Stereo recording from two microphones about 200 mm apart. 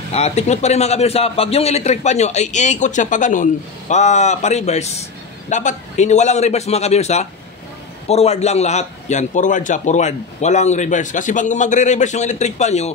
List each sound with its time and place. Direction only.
0.1 s a man's voice: 30° left (ahead or behind)